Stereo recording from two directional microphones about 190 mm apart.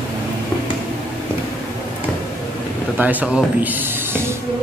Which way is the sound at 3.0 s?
10° right (ahead or behind).